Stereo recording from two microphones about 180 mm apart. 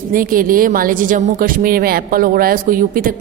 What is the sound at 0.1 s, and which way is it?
A woman's voice, 50° right (ahead or behind).